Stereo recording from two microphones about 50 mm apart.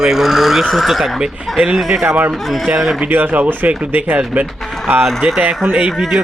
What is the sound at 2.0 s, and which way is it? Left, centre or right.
Speech, right.